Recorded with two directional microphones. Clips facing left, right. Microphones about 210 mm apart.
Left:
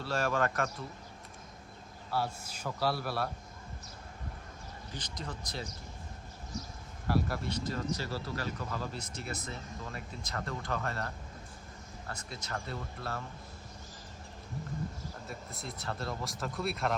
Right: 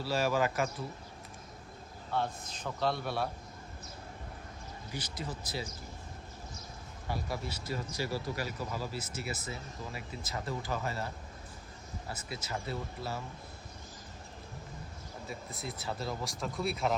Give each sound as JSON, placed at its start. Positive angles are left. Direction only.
{"t": 0.0, "sound": "speech", "side_deg": -5}
{"t": 2.0, "sound": "speech", "side_deg": 5}
{"t": 4.9, "sound": "speech", "side_deg": -10}
{"t": 7.1, "sound": "speech", "side_deg": 0}
{"t": 15.3, "sound": "speech", "side_deg": 0}